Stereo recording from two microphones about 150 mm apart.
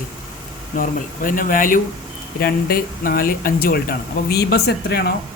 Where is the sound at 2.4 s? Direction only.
75° left (ahead or behind).